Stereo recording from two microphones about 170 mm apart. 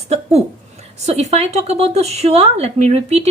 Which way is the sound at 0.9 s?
40° right (ahead or behind).